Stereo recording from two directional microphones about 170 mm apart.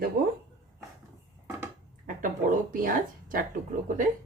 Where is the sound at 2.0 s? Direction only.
50° right (ahead or behind).